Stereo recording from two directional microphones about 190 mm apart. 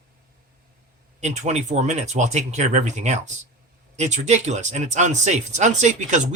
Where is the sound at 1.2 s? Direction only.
35° right (ahead or behind).